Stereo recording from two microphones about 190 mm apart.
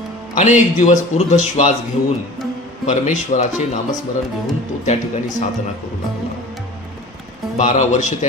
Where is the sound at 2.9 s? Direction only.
40° left (ahead or behind).